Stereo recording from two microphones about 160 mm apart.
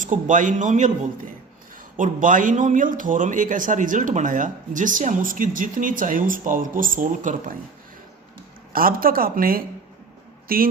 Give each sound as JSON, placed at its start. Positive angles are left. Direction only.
{"t": 0.0, "sound": "speech", "side_deg": -55}
{"t": 2.0, "sound": "a man's voice", "side_deg": -55}
{"t": 8.7, "sound": "a man's voice", "side_deg": -65}